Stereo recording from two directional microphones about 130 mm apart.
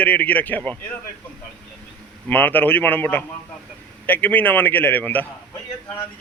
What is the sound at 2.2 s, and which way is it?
A man's voice, 15° left (ahead or behind).